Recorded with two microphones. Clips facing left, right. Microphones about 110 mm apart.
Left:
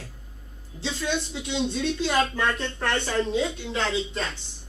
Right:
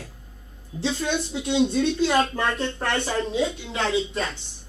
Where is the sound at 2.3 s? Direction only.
45° right (ahead or behind).